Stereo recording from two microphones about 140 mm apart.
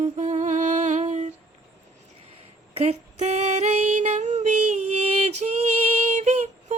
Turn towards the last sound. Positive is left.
turn(degrees=-55)  # may be behind; listen again after turning